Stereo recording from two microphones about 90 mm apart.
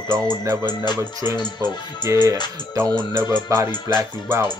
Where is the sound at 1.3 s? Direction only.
50° left (ahead or behind).